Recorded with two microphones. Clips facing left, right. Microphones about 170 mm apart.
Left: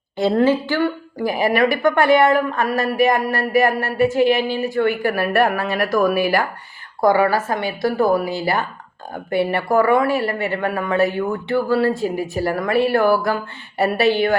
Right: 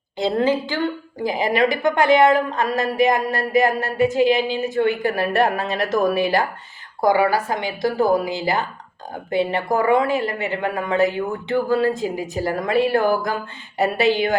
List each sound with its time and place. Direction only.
0.3 s a woman's voice: 15° right (ahead or behind)